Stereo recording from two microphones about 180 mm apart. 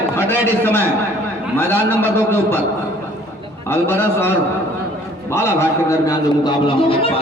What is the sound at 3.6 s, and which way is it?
A man's voice, 15° left (ahead or behind).